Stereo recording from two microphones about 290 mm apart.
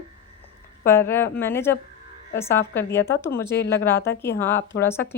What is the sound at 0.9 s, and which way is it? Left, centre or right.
Speech, centre.